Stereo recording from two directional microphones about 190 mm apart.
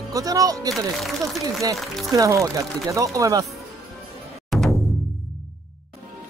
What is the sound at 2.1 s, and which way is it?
Speech, 15° right (ahead or behind).